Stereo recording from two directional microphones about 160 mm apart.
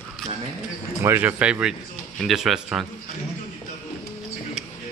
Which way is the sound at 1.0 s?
10° right (ahead or behind).